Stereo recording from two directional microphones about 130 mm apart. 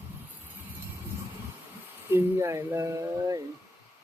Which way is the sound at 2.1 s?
20° right (ahead or behind).